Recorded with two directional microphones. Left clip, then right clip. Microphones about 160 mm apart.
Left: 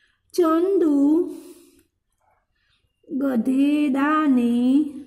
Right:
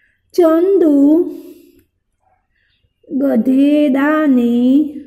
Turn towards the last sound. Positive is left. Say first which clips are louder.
# right 7 dB
turn(degrees=-5)  # may be behind; listen again after turning